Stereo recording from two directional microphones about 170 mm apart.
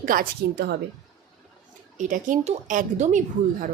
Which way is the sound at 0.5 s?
80° right.